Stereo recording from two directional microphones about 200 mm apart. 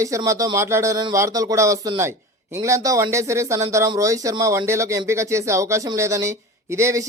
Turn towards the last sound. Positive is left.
turn(degrees=-15)  # may be behind; listen again after turning